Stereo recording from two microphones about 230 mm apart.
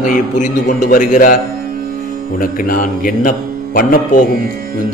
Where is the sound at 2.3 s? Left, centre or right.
Left.